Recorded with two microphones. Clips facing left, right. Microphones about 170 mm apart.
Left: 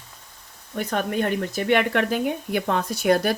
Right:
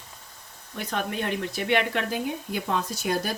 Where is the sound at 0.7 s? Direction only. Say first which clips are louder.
Left 5 dB; 50° left (ahead or behind).